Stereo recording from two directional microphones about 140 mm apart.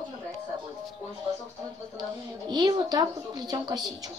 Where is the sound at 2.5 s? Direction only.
30° right (ahead or behind).